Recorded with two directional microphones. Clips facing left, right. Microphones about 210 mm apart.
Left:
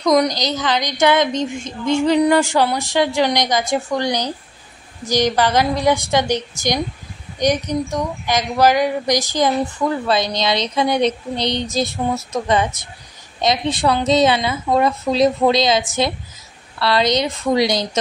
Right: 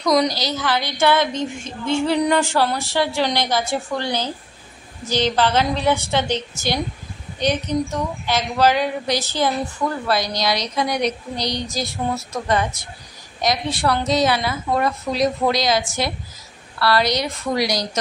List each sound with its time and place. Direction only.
0.0 s a woman's voice: 20° left (ahead or behind)